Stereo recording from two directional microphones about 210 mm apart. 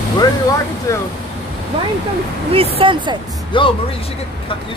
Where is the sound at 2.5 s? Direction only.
25° right (ahead or behind).